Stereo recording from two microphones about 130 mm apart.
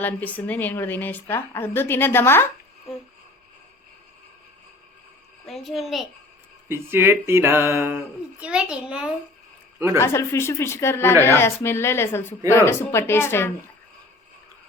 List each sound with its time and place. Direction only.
0.0 s a woman's voice: 10° left (ahead or behind)
2.9 s a sound: centre (ahead or behind)
5.5 s a child's voice: centre (ahead or behind)
6.7 s a sound: 20° right (ahead or behind)
8.4 s a child's voice: 10° right (ahead or behind)
10.0 s speech: 20° left (ahead or behind)